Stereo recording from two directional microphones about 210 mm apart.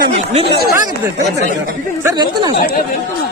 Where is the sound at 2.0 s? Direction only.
20° right (ahead or behind).